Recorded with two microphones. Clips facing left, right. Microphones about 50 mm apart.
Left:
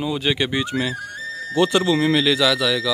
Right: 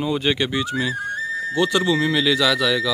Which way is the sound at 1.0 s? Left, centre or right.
Right.